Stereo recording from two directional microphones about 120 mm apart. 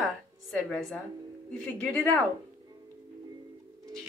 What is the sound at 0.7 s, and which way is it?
Speech, 5° left (ahead or behind).